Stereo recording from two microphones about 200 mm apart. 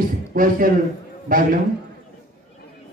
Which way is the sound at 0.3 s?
45° right (ahead or behind).